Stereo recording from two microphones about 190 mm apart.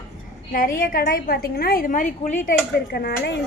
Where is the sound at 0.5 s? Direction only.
45° left (ahead or behind).